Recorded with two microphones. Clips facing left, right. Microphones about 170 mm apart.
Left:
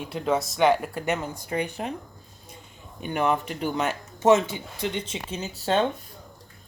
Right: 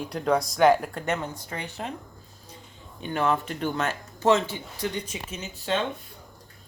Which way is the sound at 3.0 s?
15° left (ahead or behind).